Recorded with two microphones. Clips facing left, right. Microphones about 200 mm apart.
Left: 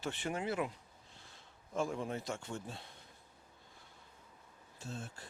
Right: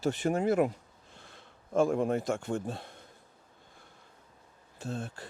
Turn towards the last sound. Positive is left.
turn(degrees=-60)  # may be behind; listen again after turning